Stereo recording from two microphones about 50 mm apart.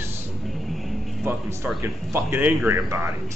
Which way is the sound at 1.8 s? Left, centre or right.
Right.